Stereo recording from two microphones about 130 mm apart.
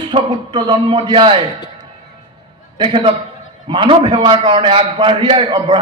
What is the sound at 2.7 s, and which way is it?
A man's voice, 45° right (ahead or behind).